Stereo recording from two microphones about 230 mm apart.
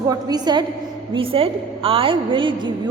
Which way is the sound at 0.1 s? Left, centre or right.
Centre.